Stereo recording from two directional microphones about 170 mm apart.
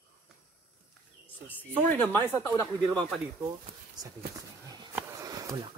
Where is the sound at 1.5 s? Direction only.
10° left (ahead or behind).